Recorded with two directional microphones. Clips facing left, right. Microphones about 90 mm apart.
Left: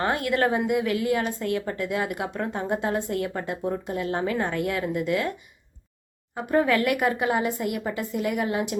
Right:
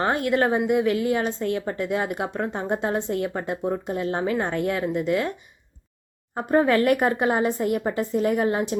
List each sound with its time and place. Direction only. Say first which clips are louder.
0.0 s a woman's voice: right 2 dB; 25° right (ahead or behind)
6.5 s a woman's voice: right 3 dB; 30° right (ahead or behind)